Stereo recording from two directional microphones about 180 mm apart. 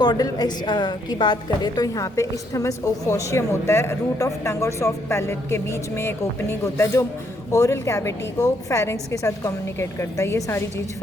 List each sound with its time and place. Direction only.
0.0 s a woman's voice: 20° left (ahead or behind)